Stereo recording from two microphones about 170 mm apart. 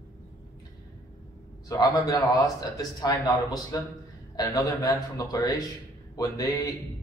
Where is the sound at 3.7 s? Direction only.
20° left (ahead or behind).